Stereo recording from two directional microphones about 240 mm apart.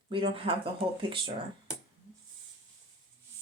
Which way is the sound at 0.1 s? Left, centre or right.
Right.